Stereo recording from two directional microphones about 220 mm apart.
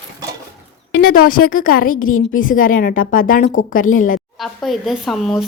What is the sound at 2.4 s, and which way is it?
Speech, 40° left (ahead or behind).